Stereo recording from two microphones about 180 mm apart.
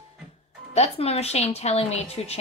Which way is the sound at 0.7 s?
35° left (ahead or behind).